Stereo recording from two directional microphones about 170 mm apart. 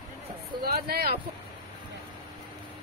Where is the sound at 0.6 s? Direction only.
65° right (ahead or behind).